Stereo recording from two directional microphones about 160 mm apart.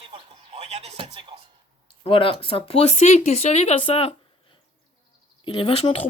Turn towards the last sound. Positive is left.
turn(degrees=35)  # may be behind; listen again after turning